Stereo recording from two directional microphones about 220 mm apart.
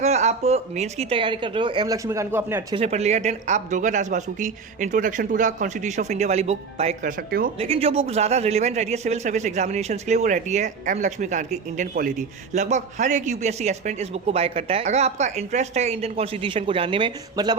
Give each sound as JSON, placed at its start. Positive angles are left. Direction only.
{"t": 0.0, "sound": "a man's voice", "side_deg": -30}
{"t": 2.7, "sound": "a man's voice", "side_deg": -30}
{"t": 7.2, "sound": "speech", "side_deg": -45}
{"t": 7.6, "sound": "a man's voice", "side_deg": -25}